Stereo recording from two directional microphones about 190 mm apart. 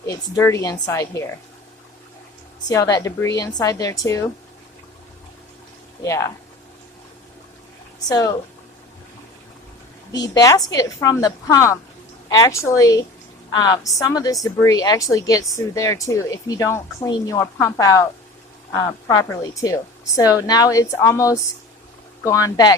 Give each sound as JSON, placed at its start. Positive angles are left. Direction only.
{"t": 0.0, "sound": "speech", "side_deg": 20}
{"t": 2.6, "sound": "a woman's voice", "side_deg": 20}
{"t": 6.0, "sound": "speech", "side_deg": 15}
{"t": 8.1, "sound": "a woman's voice", "side_deg": 20}
{"t": 10.1, "sound": "a woman's voice", "side_deg": 20}